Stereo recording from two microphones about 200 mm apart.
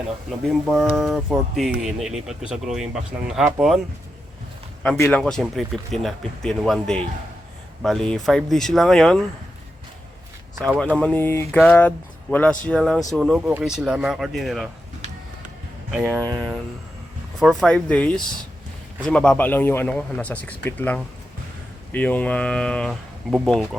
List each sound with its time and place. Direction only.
0.4 s speech: centre (ahead or behind)
4.9 s speech: 10° left (ahead or behind)
10.5 s speech: 15° right (ahead or behind)
10.9 s speech: 10° left (ahead or behind)
16.0 s speech: 15° right (ahead or behind)
17.4 s speech: centre (ahead or behind)